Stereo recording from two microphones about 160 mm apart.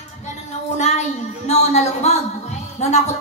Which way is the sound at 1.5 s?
45° left (ahead or behind).